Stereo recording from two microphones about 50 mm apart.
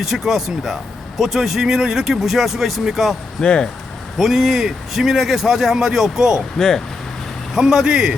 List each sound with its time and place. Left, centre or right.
0.0 s a man's voice: centre
3.4 s speech: centre
4.2 s a man's voice: centre
6.6 s speech: centre
7.5 s a man's voice: centre